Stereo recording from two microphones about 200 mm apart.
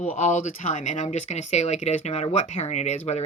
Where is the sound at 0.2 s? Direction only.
35° left (ahead or behind).